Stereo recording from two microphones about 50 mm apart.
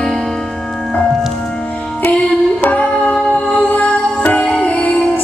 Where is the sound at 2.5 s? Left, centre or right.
Left.